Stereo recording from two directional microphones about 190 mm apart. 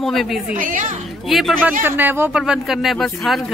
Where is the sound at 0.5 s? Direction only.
45° right (ahead or behind).